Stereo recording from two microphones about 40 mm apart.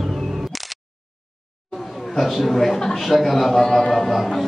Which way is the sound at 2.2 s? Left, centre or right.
Centre.